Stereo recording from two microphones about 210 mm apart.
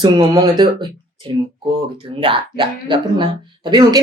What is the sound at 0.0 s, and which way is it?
Speech, 20° right (ahead or behind).